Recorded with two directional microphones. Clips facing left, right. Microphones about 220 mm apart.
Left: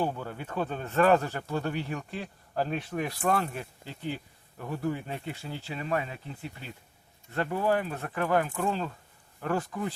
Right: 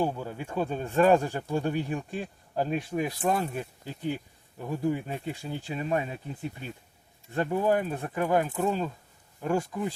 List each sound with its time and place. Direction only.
0.0 s speech: 10° right (ahead or behind)
7.3 s speech: 15° right (ahead or behind)